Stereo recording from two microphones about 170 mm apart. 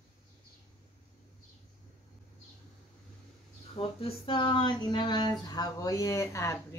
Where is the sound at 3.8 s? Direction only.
35° left (ahead or behind).